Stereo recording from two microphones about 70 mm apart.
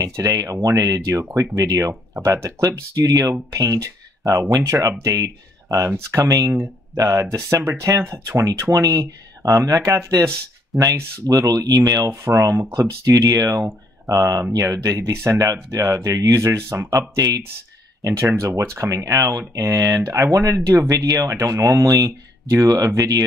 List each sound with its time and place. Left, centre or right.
0.0 s speech: right
1.3 s speech: right
10.7 s speech: centre
11.2 s speech: right
12.3 s speech: right
12.7 s speech: right
17.1 s speech: right
18.0 s speech: right
20.9 s speech: right
21.3 s speech: right